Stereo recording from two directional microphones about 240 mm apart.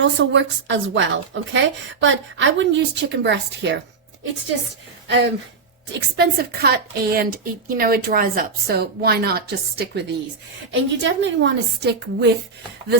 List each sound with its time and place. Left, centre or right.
0.0 s a woman's voice: right
5.0 s a woman's voice: right